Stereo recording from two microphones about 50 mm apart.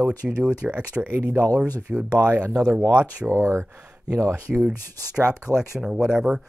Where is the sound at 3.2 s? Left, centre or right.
Right.